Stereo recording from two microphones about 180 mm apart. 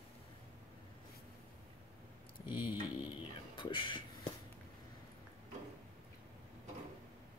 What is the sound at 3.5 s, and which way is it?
Speech, 25° left (ahead or behind).